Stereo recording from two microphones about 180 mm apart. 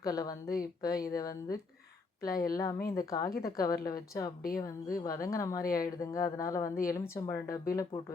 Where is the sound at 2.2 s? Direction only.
55° left (ahead or behind).